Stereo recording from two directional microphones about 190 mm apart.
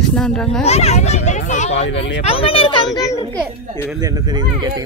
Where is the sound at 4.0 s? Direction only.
20° right (ahead or behind).